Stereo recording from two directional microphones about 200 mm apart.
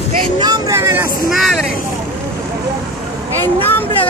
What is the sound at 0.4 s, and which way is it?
Vehicle, 20° right (ahead or behind).